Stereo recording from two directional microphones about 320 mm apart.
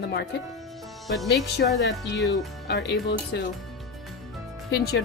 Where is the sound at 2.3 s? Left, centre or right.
Left.